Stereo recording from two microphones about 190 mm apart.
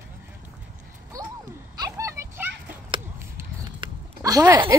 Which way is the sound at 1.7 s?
20° right (ahead or behind).